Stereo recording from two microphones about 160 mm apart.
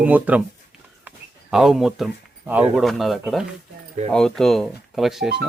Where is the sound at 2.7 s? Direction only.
Centre (ahead or behind).